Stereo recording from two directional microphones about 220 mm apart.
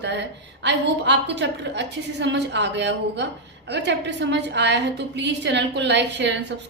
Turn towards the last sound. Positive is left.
turn(degrees=-50)  # may be behind; listen again after turning